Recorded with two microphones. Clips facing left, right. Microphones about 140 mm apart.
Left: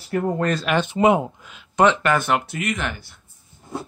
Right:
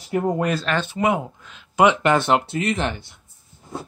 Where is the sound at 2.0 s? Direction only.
25° right (ahead or behind).